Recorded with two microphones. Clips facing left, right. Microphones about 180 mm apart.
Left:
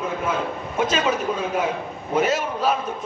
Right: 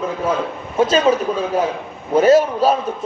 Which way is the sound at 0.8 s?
30° right (ahead or behind).